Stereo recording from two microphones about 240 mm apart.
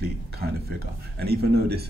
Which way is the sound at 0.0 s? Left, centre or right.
Right.